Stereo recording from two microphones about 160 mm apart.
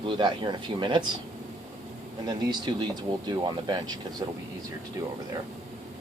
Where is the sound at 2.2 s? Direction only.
30° right (ahead or behind).